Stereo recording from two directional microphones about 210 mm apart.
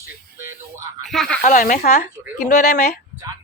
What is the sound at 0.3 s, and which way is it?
Speech, 10° right (ahead or behind).